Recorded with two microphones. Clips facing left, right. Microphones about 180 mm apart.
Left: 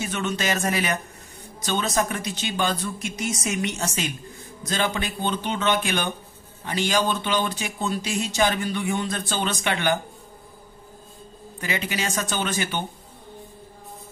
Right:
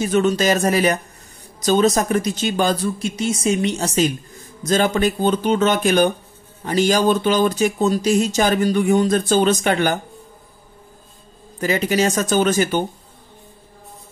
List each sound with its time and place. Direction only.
0.0 s speech: 40° right (ahead or behind)
11.6 s speech: 40° right (ahead or behind)